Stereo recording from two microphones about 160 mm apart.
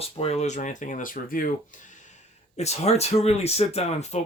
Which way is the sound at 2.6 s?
40° left (ahead or behind).